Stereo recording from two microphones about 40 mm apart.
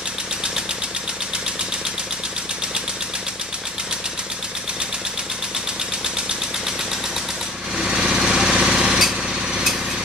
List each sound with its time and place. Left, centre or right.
7.7 s lawn mower: centre
8.8 s light engine: centre